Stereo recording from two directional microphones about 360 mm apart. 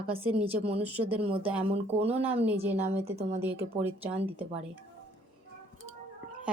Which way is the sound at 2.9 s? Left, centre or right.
Centre.